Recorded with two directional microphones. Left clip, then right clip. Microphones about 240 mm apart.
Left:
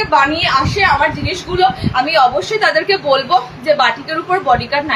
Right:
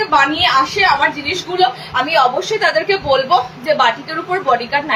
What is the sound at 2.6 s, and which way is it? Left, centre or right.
Speech, centre.